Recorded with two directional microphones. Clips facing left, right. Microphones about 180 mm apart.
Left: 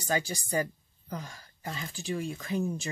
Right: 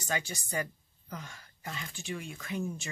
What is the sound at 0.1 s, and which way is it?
Speech, 35° left (ahead or behind).